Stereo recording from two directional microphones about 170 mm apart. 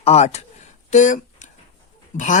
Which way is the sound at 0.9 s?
45° left (ahead or behind).